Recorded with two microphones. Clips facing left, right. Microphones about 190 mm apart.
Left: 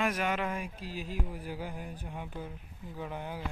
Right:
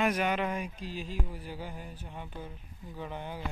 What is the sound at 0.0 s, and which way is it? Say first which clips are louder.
Mantra: right 2 dB; centre (ahead or behind).